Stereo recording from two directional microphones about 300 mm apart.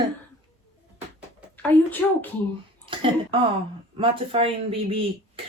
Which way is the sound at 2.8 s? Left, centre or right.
Centre.